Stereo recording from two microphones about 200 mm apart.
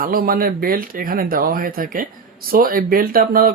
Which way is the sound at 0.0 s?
45° right (ahead or behind).